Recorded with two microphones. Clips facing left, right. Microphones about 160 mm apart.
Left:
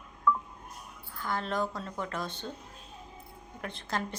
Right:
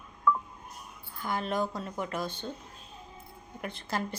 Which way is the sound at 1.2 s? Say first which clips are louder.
Right 1 dB; 15° right (ahead or behind).